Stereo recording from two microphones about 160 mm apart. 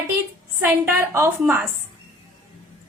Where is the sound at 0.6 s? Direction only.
10° right (ahead or behind).